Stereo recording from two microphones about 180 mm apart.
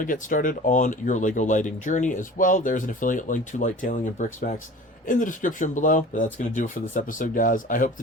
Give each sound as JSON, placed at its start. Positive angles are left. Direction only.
{"t": 0.0, "sound": "speech", "side_deg": 45}